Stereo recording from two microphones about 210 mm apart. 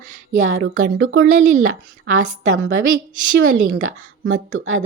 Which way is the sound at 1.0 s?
55° right (ahead or behind).